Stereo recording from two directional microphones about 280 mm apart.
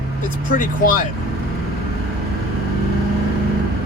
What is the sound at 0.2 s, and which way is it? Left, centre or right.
Speech, left.